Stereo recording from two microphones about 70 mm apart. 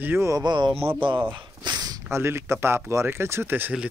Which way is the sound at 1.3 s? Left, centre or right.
Right.